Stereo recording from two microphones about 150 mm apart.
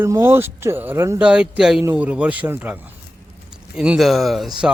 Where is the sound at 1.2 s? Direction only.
5° right (ahead or behind).